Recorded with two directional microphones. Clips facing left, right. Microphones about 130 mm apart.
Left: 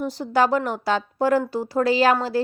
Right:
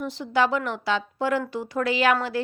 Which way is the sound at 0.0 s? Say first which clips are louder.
Left 3 dB; 40° left (ahead or behind).